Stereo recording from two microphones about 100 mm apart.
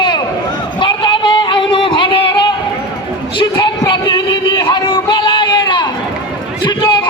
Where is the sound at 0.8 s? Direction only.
55° left (ahead or behind).